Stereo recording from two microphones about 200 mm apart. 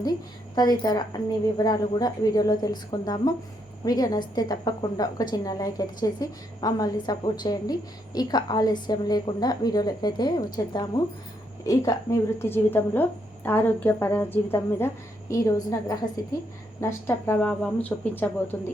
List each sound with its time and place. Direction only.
0.0 s a woman's voice: 20° left (ahead or behind)